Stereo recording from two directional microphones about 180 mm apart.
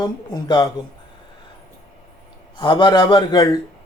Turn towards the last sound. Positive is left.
turn(degrees=25)  # may be behind; listen again after turning